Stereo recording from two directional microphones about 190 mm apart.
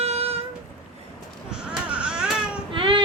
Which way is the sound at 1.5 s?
5° right (ahead or behind).